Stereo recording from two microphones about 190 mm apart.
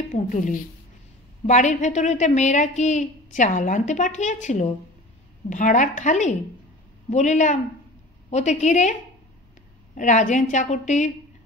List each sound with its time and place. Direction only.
0.1 s a woman's voice: 40° left (ahead or behind)
9.9 s a woman's voice: 40° left (ahead or behind)